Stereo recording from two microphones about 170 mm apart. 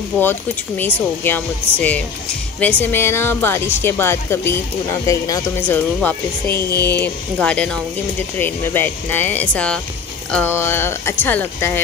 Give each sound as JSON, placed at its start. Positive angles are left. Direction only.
{"t": 0.2, "sound": "speech", "side_deg": 10}
{"t": 6.5, "sound": "speech", "side_deg": 65}
{"t": 6.9, "sound": "speech", "side_deg": 10}